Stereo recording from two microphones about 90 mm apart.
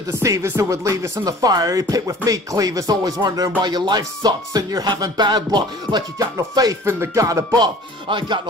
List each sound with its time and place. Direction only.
0.2 s speech: 35° right (ahead or behind); by 6.2 s 50° right (ahead or behind)
6.5 s speech: 40° right (ahead or behind)
7.5 s music: 60° right (ahead or behind)